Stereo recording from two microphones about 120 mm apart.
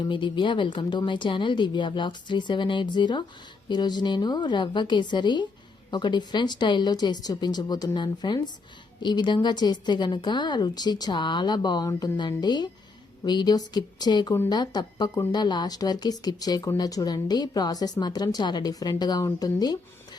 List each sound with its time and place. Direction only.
0.0 s speech: 45° left (ahead or behind)